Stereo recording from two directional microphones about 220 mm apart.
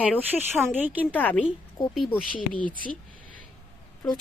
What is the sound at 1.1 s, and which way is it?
A woman's voice, 5° left (ahead or behind).